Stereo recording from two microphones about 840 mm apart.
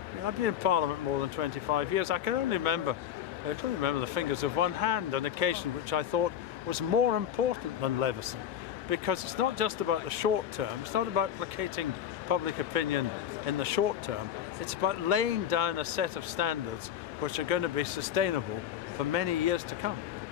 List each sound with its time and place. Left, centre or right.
0.4 s speech: right
7.4 s speech: right